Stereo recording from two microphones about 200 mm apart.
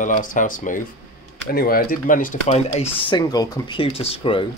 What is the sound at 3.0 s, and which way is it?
Speech, 25° left (ahead or behind).